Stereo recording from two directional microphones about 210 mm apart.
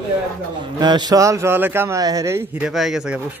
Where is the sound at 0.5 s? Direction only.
20° right (ahead or behind).